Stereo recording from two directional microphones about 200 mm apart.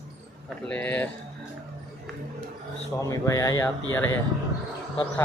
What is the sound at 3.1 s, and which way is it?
Speech, 15° left (ahead or behind).